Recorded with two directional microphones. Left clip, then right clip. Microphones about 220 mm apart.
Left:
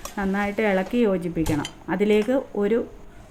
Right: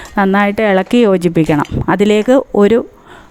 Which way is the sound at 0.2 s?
50° right (ahead or behind).